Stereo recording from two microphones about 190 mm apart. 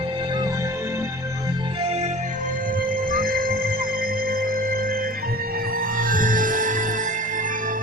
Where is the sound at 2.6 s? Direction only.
50° right (ahead or behind).